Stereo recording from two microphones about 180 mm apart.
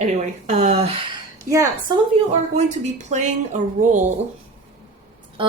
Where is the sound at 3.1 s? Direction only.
40° right (ahead or behind).